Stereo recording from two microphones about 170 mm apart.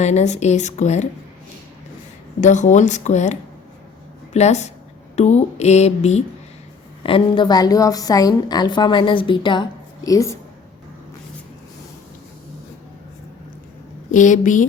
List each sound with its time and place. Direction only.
0.0 s speech: 40° left (ahead or behind)
2.4 s a woman's voice: 45° left (ahead or behind); by 10.3 s 20° left (ahead or behind)
14.1 s speech: 50° left (ahead or behind)